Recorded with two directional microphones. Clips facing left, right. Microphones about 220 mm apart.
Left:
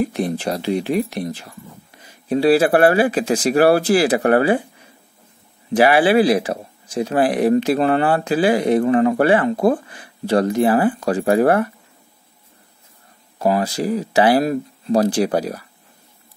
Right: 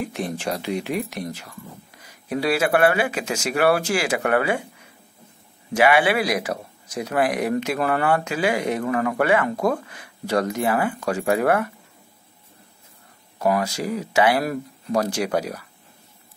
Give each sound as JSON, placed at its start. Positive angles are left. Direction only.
{"t": 0.0, "sound": "speech", "side_deg": 35}
{"t": 5.7, "sound": "speech", "side_deg": 35}
{"t": 13.4, "sound": "speech", "side_deg": 30}